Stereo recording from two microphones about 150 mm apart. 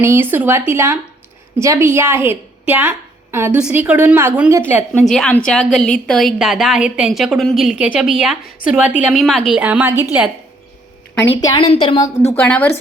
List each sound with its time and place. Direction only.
0.0 s a woman's voice: 15° right (ahead or behind)
5.0 s a woman's voice: 5° left (ahead or behind)
11.1 s a woman's voice: 15° left (ahead or behind)
11.3 s a woman's voice: 30° left (ahead or behind)
12.3 s a woman's voice: 10° left (ahead or behind)